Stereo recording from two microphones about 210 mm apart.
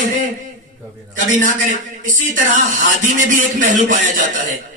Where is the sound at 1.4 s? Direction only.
40° right (ahead or behind).